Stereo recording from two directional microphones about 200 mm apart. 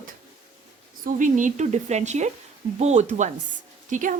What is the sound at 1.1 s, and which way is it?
Speech, 40° right (ahead or behind).